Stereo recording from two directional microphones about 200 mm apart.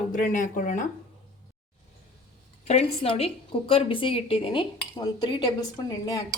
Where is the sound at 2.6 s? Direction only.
30° left (ahead or behind).